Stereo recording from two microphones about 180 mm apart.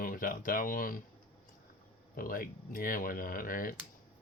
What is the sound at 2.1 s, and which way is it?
Speech, 50° left (ahead or behind).